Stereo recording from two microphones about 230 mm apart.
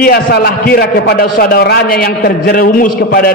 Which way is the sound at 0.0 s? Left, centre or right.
Left.